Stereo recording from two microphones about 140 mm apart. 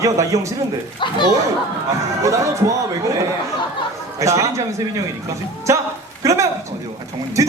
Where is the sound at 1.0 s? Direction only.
35° left (ahead or behind).